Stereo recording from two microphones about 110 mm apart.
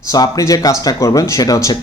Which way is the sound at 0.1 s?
30° left (ahead or behind).